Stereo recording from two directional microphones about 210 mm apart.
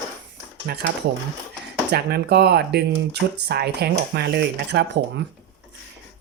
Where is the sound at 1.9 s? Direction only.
50° right (ahead or behind).